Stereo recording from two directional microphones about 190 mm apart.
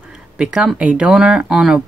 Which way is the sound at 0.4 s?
5° right (ahead or behind).